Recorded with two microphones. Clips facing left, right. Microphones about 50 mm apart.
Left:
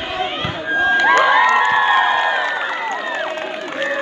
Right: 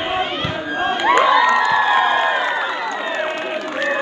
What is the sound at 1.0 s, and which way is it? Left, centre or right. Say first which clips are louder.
Crowd: even; centre.